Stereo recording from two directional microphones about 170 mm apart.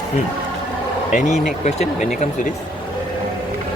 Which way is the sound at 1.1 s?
45° left (ahead or behind).